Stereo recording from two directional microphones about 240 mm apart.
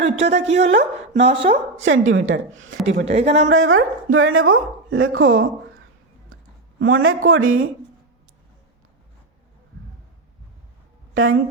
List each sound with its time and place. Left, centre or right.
0.0 s a woman's voice: right
1.7 s a woman's voice: right
3.1 s a woman's voice: right
3.5 s speech: right
6.7 s a man's voice: right
11.1 s speech: right